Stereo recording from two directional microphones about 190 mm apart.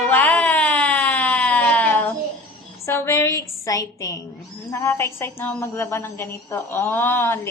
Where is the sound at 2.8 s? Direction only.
15° left (ahead or behind).